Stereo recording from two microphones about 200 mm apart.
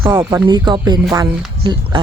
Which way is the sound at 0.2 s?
20° right (ahead or behind).